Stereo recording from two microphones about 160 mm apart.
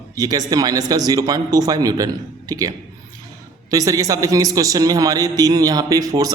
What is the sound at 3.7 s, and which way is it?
A man's voice, 20° right (ahead or behind).